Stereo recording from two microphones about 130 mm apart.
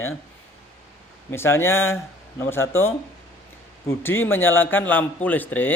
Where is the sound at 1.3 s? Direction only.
20° left (ahead or behind).